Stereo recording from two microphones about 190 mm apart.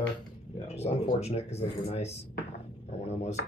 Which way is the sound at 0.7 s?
35° left (ahead or behind).